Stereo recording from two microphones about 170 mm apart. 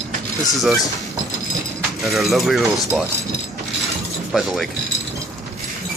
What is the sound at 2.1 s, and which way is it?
Speech, centre (ahead or behind).